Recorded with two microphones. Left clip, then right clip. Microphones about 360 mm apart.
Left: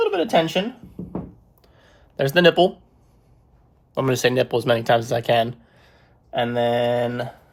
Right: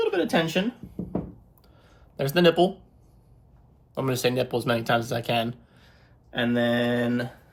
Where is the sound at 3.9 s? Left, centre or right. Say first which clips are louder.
Left 6 dB; left.